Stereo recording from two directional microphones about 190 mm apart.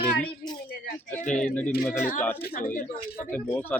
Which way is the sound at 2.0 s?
45° left (ahead or behind).